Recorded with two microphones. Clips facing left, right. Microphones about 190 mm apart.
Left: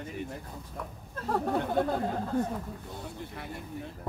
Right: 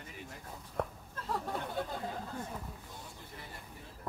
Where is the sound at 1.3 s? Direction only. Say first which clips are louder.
Left 9 dB; 65° left (ahead or behind).